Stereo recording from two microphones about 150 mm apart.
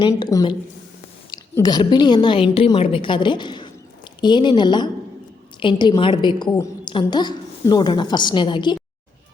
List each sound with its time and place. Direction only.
0.0 s speech: 25° left (ahead or behind)
1.6 s a woman's voice: 30° left (ahead or behind)